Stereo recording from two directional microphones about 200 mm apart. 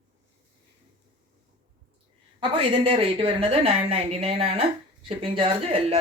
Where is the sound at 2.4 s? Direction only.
25° right (ahead or behind).